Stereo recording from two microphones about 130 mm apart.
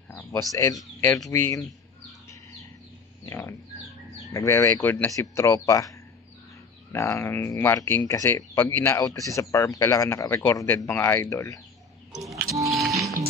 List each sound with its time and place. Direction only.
0.1 s speech: 25° left (ahead or behind)
3.3 s speech: 20° left (ahead or behind)
12.2 s music: centre (ahead or behind)